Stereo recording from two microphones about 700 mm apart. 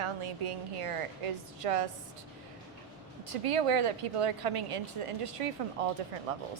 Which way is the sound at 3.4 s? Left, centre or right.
Right.